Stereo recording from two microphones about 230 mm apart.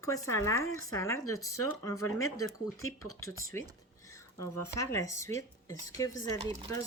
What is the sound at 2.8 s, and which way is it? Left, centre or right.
Speech, left.